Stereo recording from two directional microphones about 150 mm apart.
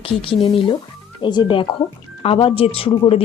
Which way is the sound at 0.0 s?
35° left (ahead or behind).